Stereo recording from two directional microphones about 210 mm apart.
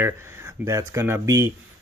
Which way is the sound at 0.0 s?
10° right (ahead or behind).